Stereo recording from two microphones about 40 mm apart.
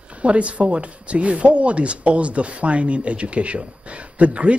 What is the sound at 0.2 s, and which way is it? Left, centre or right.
Speech, right.